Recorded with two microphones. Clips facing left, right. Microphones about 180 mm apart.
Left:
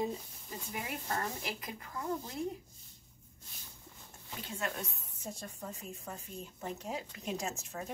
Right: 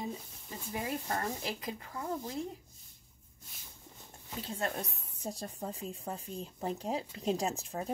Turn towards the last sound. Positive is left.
turn(degrees=-35)  # may be behind; listen again after turning